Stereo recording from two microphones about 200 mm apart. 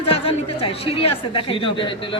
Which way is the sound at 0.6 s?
25° left (ahead or behind).